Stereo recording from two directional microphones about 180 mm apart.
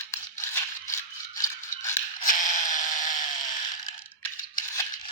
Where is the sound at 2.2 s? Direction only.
45° left (ahead or behind).